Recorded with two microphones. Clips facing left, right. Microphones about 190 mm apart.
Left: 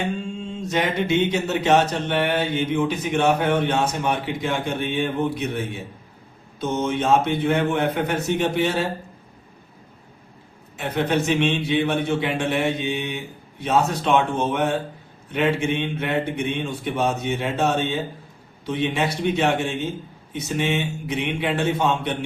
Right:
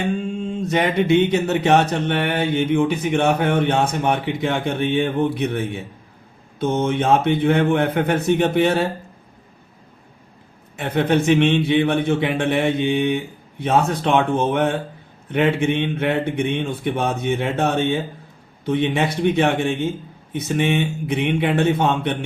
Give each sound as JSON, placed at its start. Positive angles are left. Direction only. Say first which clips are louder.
{"t": 0.2, "sound": "mantra", "louder": "right 5 dB", "side_deg": -55}
{"t": 10.8, "sound": "mantra", "louder": "right 3 dB", "side_deg": -60}